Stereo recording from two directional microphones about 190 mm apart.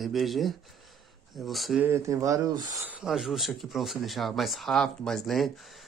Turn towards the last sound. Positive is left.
turn(degrees=0)  # may be behind; listen again after turning